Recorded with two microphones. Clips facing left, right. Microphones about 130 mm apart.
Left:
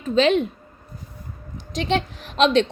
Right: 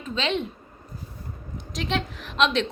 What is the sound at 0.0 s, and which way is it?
Speech, 45° left (ahead or behind).